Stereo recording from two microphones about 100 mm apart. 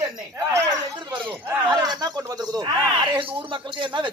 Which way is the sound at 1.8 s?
40° right (ahead or behind).